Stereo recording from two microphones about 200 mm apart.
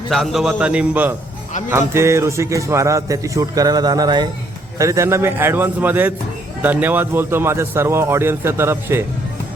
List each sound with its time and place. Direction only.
0.1 s a man's voice: centre (ahead or behind)